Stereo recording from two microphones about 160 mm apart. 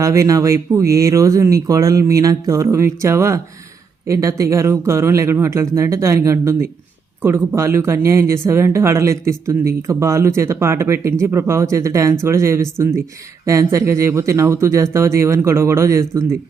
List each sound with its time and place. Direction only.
0.0 s speech: 20° right (ahead or behind)